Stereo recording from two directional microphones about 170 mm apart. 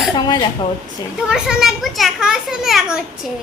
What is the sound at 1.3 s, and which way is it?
A woman's voice, centre (ahead or behind).